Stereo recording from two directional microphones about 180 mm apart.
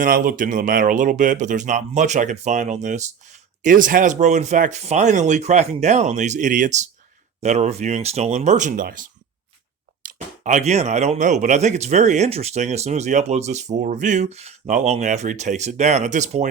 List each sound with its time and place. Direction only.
0.0 s speech: 50° right (ahead or behind)